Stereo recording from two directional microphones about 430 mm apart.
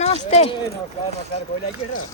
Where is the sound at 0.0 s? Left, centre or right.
Centre.